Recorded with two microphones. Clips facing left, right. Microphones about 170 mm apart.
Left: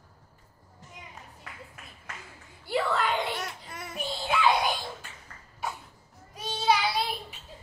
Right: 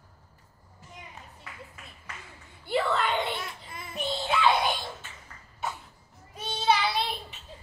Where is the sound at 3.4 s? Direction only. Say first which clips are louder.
Left 2 dB; 75° left (ahead or behind).